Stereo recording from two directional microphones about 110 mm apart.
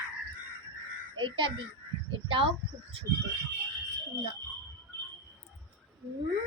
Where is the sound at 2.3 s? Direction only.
55° right (ahead or behind).